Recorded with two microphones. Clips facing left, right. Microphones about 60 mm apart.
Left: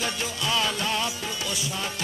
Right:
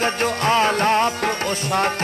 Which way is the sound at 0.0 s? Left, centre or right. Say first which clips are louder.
Right 9 dB; right.